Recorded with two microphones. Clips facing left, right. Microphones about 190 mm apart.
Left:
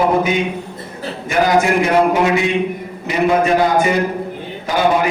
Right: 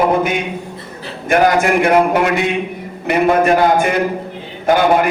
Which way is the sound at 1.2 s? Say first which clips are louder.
Right 2 dB; 55° right (ahead or behind).